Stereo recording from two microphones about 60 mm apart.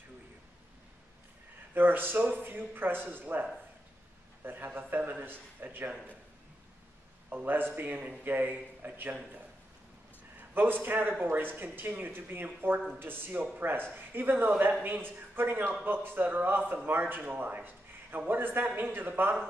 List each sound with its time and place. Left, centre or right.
1.7 s speech: right
4.5 s speech: right
7.2 s speech: right
10.5 s speech: right